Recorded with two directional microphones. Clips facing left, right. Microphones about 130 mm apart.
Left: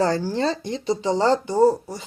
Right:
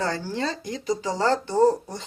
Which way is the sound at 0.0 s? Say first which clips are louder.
Left 6 dB; 35° left (ahead or behind).